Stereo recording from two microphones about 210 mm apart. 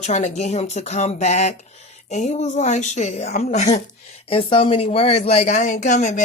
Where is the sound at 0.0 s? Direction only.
30° left (ahead or behind).